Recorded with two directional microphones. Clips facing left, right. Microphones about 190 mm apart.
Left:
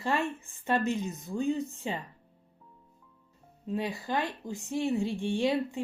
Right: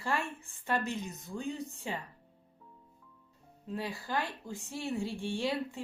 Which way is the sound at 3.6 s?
20° left (ahead or behind).